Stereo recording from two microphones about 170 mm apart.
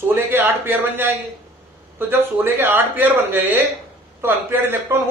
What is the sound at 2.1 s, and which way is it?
A man's voice, 10° right (ahead or behind).